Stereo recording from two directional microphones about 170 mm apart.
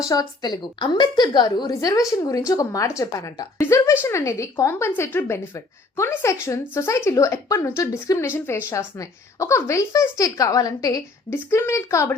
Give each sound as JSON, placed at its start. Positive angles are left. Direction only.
{"t": 0.1, "sound": "a woman's voice", "side_deg": 25}